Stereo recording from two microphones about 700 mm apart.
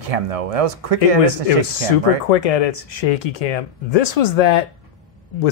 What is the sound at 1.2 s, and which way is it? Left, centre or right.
Speech, left.